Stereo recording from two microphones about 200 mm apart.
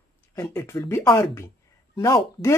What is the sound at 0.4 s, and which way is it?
Speech, 15° left (ahead or behind).